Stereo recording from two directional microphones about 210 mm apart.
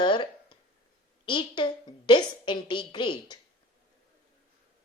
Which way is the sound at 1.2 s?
25° left (ahead or behind).